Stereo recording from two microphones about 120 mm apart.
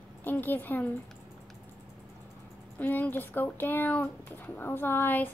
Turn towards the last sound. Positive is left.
turn(degrees=15)  # may be behind; listen again after turning